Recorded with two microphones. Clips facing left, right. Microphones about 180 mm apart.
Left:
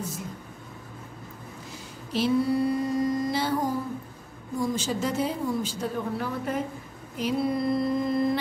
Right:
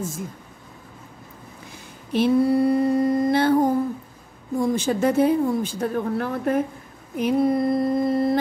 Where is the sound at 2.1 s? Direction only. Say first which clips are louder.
Right 5 dB; 55° right (ahead or behind).